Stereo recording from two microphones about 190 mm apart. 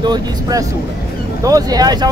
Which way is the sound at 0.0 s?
20° right (ahead or behind).